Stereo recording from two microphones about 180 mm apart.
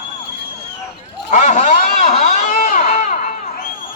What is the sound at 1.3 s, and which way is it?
Vehicle, 40° left (ahead or behind).